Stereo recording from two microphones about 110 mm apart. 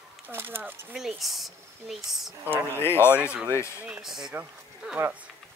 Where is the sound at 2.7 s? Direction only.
20° left (ahead or behind).